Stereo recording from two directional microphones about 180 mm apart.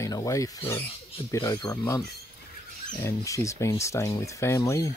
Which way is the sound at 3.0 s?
15° left (ahead or behind).